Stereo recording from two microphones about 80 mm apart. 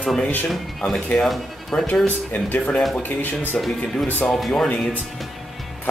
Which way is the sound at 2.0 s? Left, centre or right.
Left.